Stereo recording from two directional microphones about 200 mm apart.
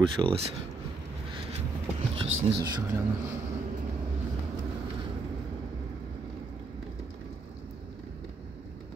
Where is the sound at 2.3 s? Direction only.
90° right.